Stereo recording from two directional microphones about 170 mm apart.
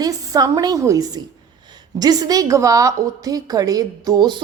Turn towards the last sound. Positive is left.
turn(degrees=-25)  # may be behind; listen again after turning